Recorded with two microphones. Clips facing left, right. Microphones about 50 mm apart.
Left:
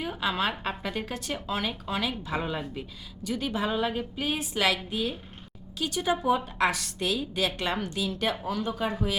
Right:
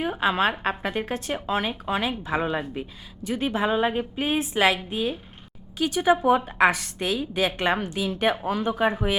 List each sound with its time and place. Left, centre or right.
0.0 s speech: right